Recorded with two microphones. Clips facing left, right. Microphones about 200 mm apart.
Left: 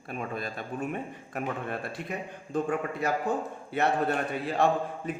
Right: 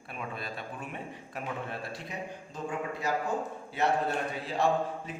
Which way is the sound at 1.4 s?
55° left (ahead or behind).